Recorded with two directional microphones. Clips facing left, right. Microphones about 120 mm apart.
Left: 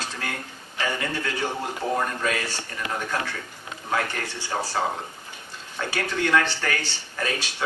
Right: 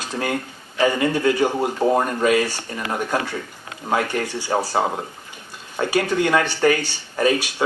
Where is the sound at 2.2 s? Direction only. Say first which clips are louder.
Right 9 dB; 15° right (ahead or behind).